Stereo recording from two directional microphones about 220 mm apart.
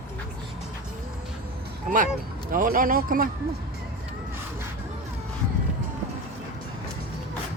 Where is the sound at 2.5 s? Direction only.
40° right (ahead or behind).